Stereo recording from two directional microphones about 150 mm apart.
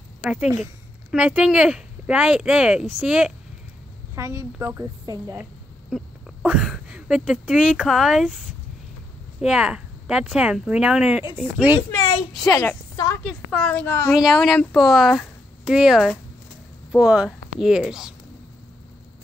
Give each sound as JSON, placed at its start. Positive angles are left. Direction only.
{"t": 0.2, "sound": "a woman's voice", "side_deg": -5}
{"t": 4.1, "sound": "a woman's voice", "side_deg": -20}
{"t": 5.4, "sound": "a sound", "side_deg": -5}
{"t": 6.4, "sound": "speech", "side_deg": -5}
{"t": 9.4, "sound": "speech", "side_deg": -5}
{"t": 12.4, "sound": "a woman's voice", "side_deg": 20}
{"t": 13.5, "sound": "a child's voice", "side_deg": 5}
{"t": 14.1, "sound": "speech", "side_deg": 0}